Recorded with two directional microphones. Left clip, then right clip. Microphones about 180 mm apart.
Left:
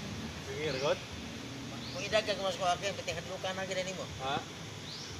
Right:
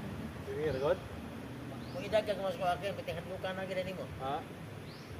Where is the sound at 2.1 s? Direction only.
45° right (ahead or behind).